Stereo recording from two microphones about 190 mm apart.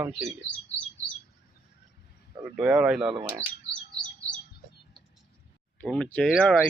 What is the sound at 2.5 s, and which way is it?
Speech, centre (ahead or behind).